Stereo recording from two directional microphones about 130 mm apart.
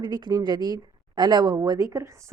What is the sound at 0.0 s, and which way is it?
A woman's voice, 35° right (ahead or behind).